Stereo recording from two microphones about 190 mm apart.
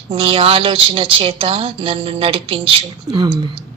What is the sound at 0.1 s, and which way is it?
Speech, 30° right (ahead or behind).